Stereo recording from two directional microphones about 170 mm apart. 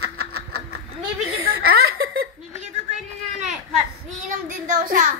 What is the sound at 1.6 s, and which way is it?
Laughter, 65° right (ahead or behind).